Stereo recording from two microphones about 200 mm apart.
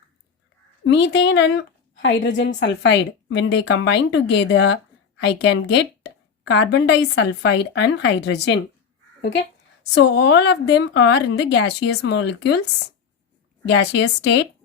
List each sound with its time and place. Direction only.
0.9 s a woman's voice: 60° left (ahead or behind)
9.9 s a woman's voice: 60° left (ahead or behind)
13.7 s a woman's voice: 60° left (ahead or behind)